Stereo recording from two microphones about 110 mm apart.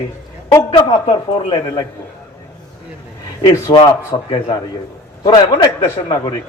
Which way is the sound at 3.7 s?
45° left (ahead or behind).